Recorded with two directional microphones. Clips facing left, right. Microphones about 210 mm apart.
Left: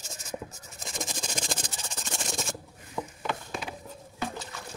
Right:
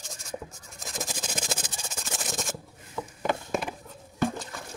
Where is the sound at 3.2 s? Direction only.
50° right (ahead or behind).